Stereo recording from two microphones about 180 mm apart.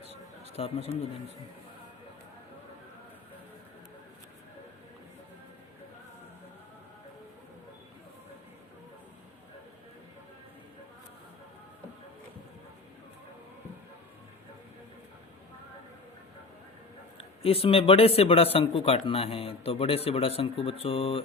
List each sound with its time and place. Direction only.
0.5 s a man's voice: 35° left (ahead or behind)
17.2 s a man's voice: 30° left (ahead or behind)